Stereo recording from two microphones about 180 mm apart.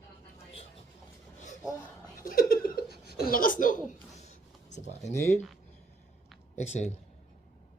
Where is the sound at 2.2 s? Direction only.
50° left (ahead or behind).